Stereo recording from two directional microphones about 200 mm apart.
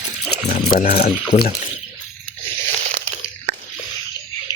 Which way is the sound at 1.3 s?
30° left (ahead or behind).